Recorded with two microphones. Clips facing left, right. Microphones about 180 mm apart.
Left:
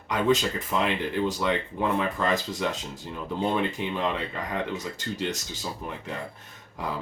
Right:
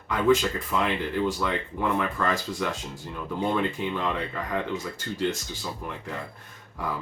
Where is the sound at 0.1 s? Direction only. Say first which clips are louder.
Right 2 dB; 20° left (ahead or behind).